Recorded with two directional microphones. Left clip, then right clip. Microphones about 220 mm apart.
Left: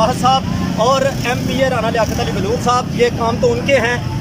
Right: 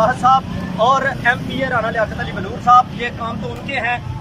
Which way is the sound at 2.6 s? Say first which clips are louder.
Right 4 dB; 20° left (ahead or behind).